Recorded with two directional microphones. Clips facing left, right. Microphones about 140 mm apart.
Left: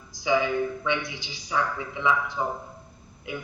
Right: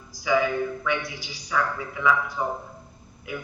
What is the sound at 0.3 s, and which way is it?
A man's voice, 25° left (ahead or behind).